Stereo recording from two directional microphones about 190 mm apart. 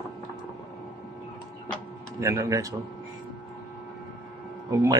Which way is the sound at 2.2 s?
15° right (ahead or behind).